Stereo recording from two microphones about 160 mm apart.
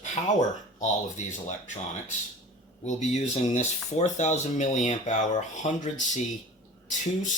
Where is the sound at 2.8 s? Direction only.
45° left (ahead or behind).